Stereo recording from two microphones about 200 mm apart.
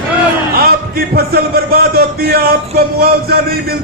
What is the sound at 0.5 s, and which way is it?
A man's voice, 50° right (ahead or behind).